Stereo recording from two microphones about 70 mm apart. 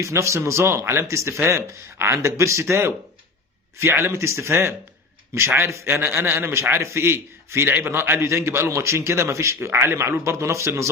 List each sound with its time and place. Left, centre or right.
0.0 s a man's voice: right